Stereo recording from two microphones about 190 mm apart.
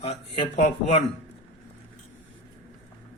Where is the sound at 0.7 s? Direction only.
40° left (ahead or behind).